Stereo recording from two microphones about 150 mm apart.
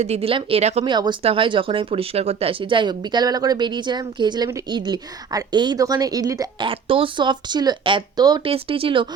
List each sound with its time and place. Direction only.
0.0 s speech: 45° right (ahead or behind)
0.9 s a woman's voice: 30° right (ahead or behind)
6.7 s speech: 35° right (ahead or behind)
8.4 s speech: 40° right (ahead or behind)